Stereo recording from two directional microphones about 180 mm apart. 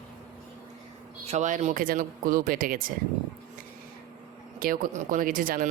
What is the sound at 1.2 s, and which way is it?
Speech, 40° right (ahead or behind).